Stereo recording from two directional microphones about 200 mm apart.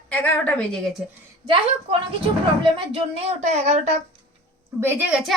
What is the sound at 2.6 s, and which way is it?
A woman's voice, 25° right (ahead or behind).